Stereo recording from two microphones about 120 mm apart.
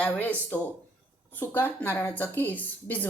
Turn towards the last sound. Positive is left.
turn(degrees=15)  # may be behind; listen again after turning